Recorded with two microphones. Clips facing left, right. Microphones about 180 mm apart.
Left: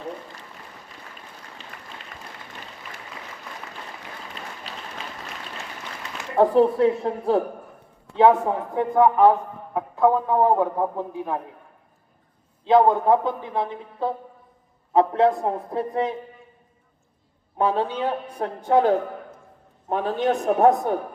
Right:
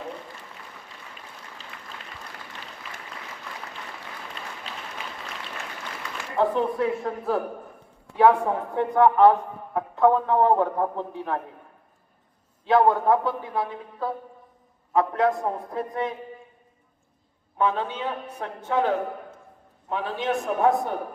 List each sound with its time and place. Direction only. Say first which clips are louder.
1.7 s applause: left 1 dB; 45° left (ahead or behind)
6.3 s a man's voice: left 6 dB; 40° left (ahead or behind); by 11.3 s 10° left (ahead or behind)
12.6 s a man's voice: left 2 dB; 20° left (ahead or behind)
17.6 s a man's voice: left 3 dB; 35° left (ahead or behind)